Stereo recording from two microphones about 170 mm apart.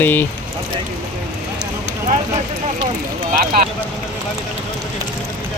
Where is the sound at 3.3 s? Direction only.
60° right (ahead or behind).